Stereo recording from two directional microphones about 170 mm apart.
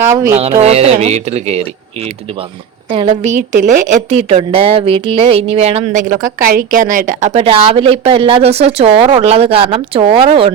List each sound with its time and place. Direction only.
0.0 s speech: 15° right (ahead or behind)
0.6 s a woman's voice: 40° right (ahead or behind)